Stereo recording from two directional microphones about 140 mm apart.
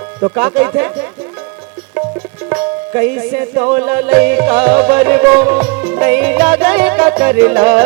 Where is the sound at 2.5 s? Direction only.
15° right (ahead or behind).